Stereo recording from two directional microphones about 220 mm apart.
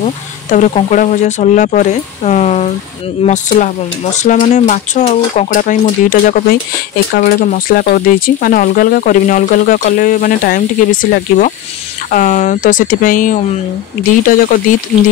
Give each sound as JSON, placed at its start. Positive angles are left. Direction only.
{"t": 0.5, "sound": "speech", "side_deg": 35}